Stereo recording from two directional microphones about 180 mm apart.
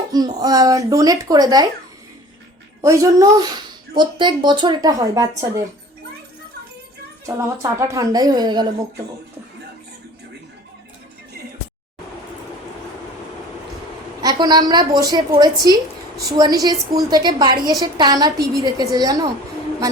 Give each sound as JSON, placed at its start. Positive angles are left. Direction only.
{"t": 0.1, "sound": "speech", "side_deg": -20}
{"t": 2.8, "sound": "a woman's voice", "side_deg": -15}
{"t": 7.3, "sound": "speech", "side_deg": -15}
{"t": 14.2, "sound": "speech", "side_deg": -20}